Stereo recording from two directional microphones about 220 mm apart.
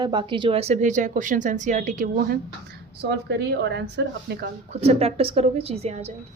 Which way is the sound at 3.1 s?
50° right (ahead or behind).